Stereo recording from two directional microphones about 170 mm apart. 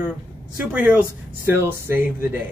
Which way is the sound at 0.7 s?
10° right (ahead or behind).